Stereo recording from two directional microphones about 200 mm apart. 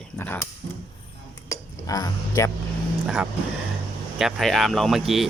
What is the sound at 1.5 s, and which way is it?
Speech, 15° left (ahead or behind).